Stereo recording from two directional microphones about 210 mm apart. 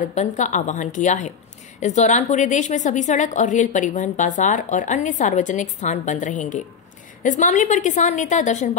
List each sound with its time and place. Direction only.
0.0 s a woman's voice: 35° left (ahead or behind)